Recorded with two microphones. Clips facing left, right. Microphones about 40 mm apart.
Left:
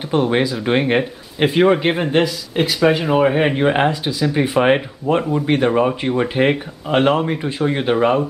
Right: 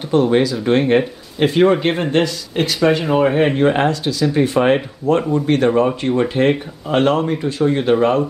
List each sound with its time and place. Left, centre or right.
0.1 s speech: centre